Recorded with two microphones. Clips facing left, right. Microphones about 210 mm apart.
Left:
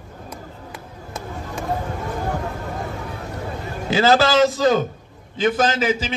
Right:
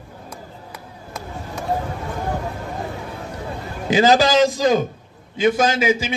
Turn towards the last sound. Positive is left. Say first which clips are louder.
# right 2 dB
turn(degrees=-10)  # may be behind; listen again after turning